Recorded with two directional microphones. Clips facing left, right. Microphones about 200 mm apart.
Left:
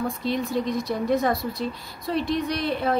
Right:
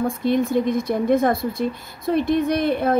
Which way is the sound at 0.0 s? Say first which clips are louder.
Right 6 dB; 50° right (ahead or behind).